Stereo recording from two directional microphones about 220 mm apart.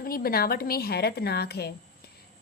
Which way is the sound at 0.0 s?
40° left (ahead or behind).